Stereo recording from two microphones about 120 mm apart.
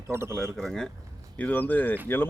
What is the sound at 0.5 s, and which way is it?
Speech, 5° left (ahead or behind).